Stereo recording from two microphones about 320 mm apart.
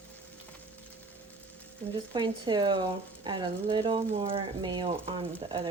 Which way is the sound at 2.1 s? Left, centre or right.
Centre.